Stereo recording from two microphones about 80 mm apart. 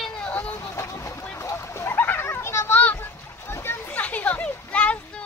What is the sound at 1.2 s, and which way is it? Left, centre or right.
Splash, left.